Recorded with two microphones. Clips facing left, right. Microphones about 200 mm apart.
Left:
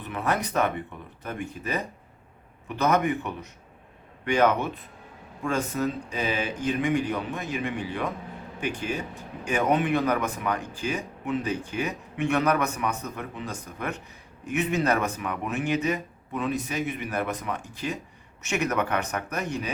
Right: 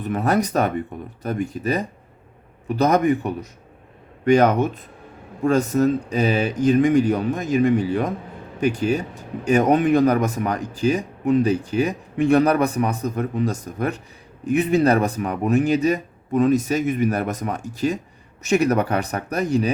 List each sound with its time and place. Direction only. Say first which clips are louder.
0.0 s speech: right 8 dB; 40° right (ahead or behind)